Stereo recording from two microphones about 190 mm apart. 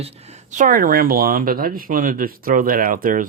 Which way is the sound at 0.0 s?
35° right (ahead or behind).